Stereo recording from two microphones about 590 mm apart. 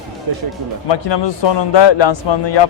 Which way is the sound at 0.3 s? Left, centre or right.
Right.